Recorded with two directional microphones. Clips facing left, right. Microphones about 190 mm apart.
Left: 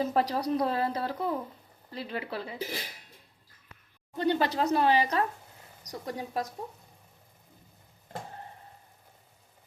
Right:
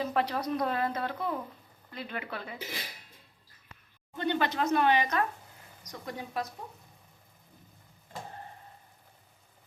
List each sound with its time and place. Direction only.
0.1 s speech: 35° left (ahead or behind)
4.2 s speech: 35° left (ahead or behind)